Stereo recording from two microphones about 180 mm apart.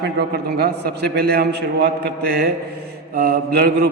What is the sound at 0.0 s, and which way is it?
A man's voice, 65° right (ahead or behind).